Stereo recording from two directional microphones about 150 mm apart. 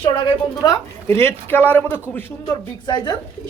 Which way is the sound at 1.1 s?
15° left (ahead or behind).